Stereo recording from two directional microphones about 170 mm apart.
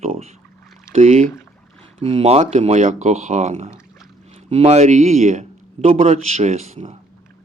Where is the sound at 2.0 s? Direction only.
30° right (ahead or behind).